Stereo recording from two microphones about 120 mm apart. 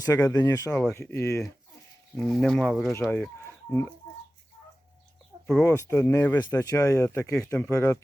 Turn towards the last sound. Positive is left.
turn(degrees=25)  # may be behind; listen again after turning